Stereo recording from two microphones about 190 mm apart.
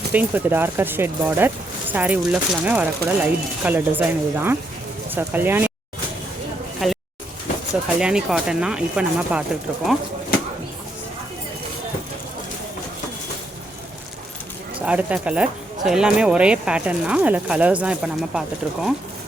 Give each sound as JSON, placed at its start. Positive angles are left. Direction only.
{"t": 0.1, "sound": "speech", "side_deg": -10}
{"t": 6.8, "sound": "a sound", "side_deg": 0}
{"t": 7.9, "sound": "speech", "side_deg": -5}
{"t": 14.8, "sound": "speech", "side_deg": -5}